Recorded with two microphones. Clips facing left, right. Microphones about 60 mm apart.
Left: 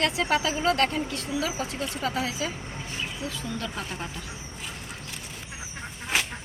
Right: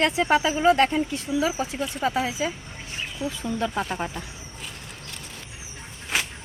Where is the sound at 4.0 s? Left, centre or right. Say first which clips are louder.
Right 5 dB; right.